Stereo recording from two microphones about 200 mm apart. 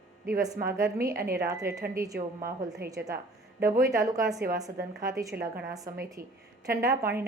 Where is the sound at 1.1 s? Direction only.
50° right (ahead or behind).